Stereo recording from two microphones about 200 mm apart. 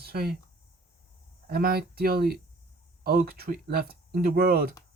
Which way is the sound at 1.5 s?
50° right (ahead or behind).